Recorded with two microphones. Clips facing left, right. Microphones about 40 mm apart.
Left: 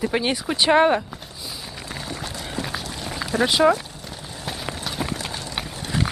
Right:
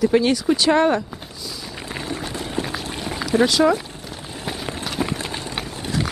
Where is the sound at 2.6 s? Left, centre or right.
Centre.